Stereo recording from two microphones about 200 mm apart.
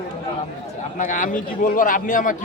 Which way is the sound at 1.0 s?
40° left (ahead or behind).